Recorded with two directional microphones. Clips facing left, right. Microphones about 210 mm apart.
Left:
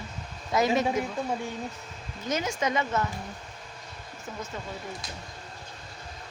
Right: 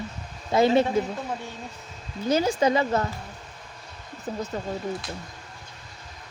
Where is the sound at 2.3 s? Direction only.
30° right (ahead or behind).